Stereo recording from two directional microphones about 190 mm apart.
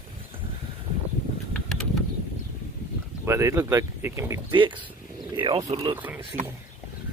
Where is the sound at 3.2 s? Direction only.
15° right (ahead or behind).